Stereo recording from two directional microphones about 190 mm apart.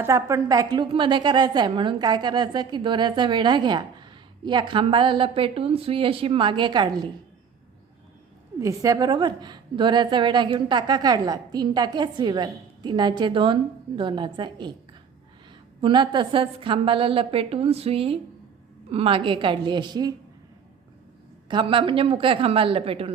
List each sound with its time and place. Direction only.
0.0 s a woman's voice: 15° right (ahead or behind)
8.5 s a woman's voice: 15° right (ahead or behind)
15.8 s a woman's voice: 25° right (ahead or behind)
21.5 s a woman's voice: 25° right (ahead or behind)